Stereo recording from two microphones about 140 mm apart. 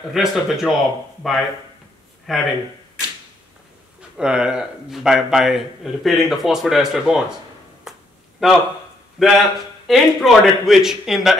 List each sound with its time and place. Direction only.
0.1 s a man's voice: centre (ahead or behind)
4.2 s a man's voice: 5° right (ahead or behind)
7.9 s a sound: 5° right (ahead or behind)
8.4 s a man's voice: 5° right (ahead or behind)